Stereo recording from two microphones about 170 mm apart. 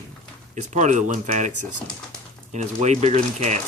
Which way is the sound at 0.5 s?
45° right (ahead or behind).